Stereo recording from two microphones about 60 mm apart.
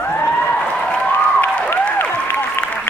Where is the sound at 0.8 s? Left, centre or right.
Centre.